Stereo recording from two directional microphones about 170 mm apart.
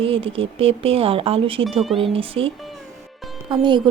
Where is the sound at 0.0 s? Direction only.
35° right (ahead or behind).